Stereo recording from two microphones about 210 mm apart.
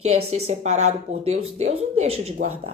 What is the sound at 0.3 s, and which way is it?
Speech, 30° right (ahead or behind).